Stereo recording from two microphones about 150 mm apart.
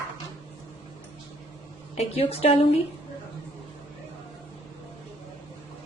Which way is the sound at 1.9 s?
45° left (ahead or behind).